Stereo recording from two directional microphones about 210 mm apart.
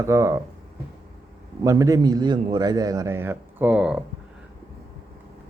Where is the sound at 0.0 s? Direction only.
15° right (ahead or behind).